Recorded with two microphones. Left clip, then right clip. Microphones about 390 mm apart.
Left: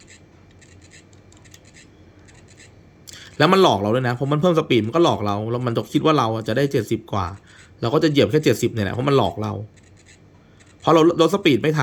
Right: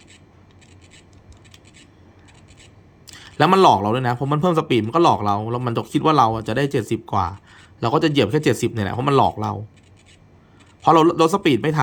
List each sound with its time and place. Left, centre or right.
3.1 s a man's voice: centre
10.8 s a man's voice: centre